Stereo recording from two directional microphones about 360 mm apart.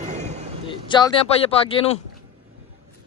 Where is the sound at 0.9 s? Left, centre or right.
Centre.